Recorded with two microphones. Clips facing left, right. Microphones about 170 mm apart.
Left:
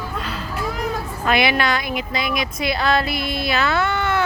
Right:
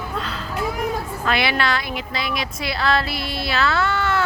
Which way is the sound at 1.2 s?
15° left (ahead or behind).